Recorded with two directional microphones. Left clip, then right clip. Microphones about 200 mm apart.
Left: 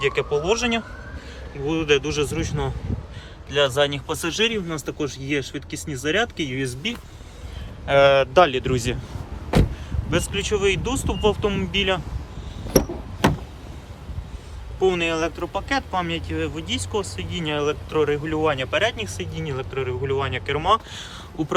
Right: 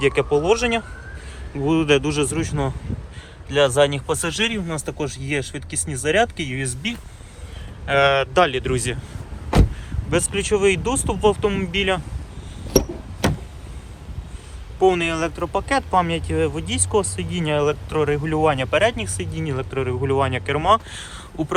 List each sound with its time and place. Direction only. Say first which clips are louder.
0.0 s speech: right 3 dB; 5° left (ahead or behind)
7.9 s speech: left 2 dB; 30° left (ahead or behind)
10.1 s speech: right 3 dB; 10° left (ahead or behind)
14.8 s speech: right 3 dB; 5° left (ahead or behind)